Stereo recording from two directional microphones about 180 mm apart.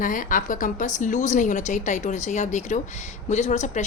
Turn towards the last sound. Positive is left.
turn(degrees=40)  # may be behind; listen again after turning